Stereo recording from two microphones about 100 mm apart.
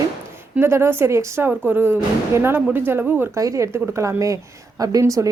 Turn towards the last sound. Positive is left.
turn(degrees=-30)  # may be behind; listen again after turning